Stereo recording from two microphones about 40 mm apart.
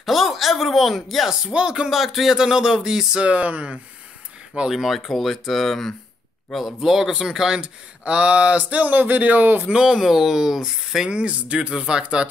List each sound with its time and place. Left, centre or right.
0.0 s speech: centre
1.3 s speech: right
1.9 s speech: centre
2.3 s speech: centre
3.2 s speech: right
4.6 s speech: centre
6.8 s speech: centre
7.6 s speech: right
9.7 s speech: centre
11.1 s speech: right